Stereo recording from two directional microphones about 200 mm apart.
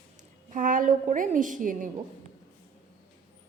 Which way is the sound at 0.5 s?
40° right (ahead or behind).